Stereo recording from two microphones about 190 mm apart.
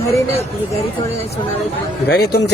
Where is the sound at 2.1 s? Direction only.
55° left (ahead or behind).